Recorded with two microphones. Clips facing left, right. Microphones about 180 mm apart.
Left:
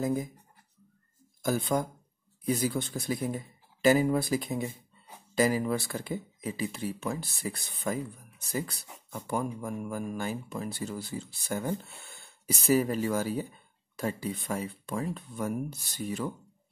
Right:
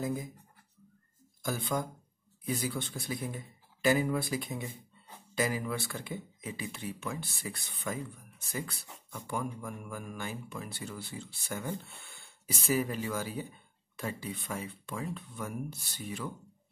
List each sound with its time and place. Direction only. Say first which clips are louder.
1.4 s speech: left 5 dB; 40° left (ahead or behind)